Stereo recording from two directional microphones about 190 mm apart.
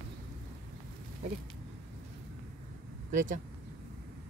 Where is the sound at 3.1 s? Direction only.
45° right (ahead or behind).